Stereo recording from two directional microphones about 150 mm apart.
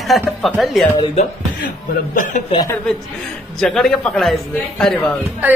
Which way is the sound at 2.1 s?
60° left (ahead or behind).